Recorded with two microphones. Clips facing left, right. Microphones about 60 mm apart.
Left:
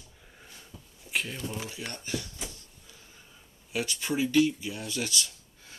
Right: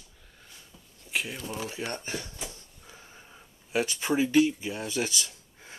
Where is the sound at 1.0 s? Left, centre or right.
Centre.